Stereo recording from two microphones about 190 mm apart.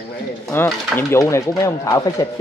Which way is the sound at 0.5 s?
10° left (ahead or behind).